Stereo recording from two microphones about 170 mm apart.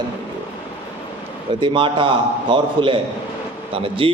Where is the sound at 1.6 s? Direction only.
30° right (ahead or behind).